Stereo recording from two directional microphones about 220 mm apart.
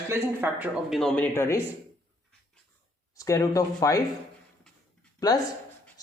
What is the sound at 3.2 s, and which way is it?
Speech, 15° left (ahead or behind).